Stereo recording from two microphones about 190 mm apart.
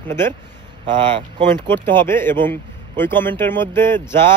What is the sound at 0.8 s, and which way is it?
Speech, 25° right (ahead or behind).